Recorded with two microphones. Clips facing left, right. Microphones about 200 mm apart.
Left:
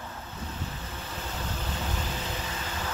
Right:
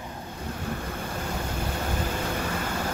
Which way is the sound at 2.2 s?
55° right (ahead or behind).